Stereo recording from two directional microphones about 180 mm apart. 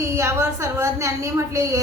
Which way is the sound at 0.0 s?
15° right (ahead or behind).